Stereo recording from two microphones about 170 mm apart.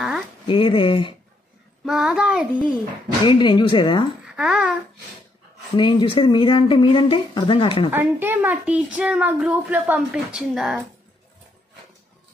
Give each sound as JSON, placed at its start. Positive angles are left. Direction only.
{"t": 0.5, "sound": "speech", "side_deg": 30}
{"t": 1.9, "sound": "child singing", "side_deg": -5}
{"t": 3.3, "sound": "speech", "side_deg": 25}
{"t": 4.4, "sound": "child singing", "side_deg": -5}
{"t": 5.8, "sound": "speech", "side_deg": 30}
{"t": 7.9, "sound": "a child's voice", "side_deg": -10}